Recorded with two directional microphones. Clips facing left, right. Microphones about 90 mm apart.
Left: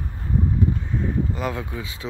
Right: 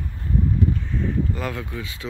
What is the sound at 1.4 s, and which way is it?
Speech, 20° left (ahead or behind).